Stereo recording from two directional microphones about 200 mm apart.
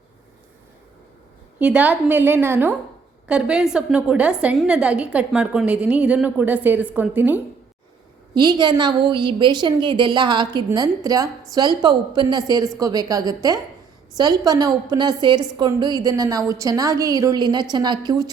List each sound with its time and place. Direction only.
1.5 s a woman's voice: 10° right (ahead or behind)
8.4 s a woman's voice: 20° right (ahead or behind)